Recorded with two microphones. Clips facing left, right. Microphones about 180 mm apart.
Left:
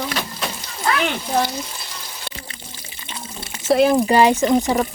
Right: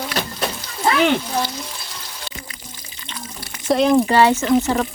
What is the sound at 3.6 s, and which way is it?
Speech, 5° left (ahead or behind).